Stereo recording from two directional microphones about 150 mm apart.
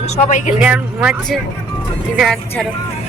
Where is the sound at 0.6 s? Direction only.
10° right (ahead or behind).